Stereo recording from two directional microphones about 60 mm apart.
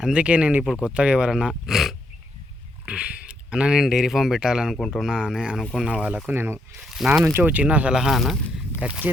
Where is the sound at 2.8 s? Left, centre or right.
Centre.